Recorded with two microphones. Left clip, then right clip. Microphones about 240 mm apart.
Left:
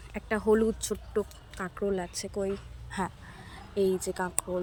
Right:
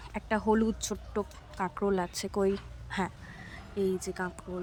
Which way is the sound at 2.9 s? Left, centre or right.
Centre.